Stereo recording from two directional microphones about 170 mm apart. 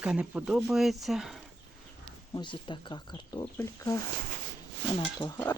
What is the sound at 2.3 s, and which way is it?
Speech, 30° left (ahead or behind).